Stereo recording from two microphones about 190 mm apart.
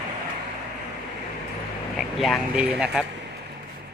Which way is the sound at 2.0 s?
Centre (ahead or behind).